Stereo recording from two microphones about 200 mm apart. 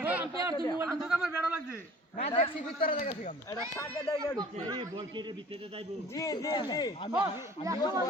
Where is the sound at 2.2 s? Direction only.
30° left (ahead or behind).